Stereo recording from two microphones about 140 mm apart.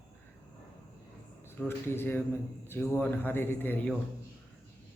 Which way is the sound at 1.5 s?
15° left (ahead or behind).